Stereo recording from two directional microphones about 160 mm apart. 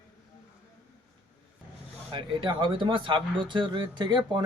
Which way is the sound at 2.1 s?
30° right (ahead or behind).